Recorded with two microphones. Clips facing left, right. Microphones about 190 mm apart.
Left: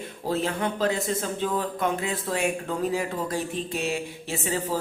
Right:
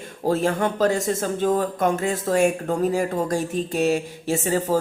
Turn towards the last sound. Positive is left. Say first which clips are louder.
# right 6 dB
turn(degrees=-40)  # may be behind; listen again after turning